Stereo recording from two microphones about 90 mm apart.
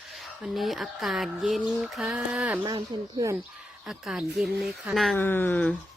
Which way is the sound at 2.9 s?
55° right (ahead or behind).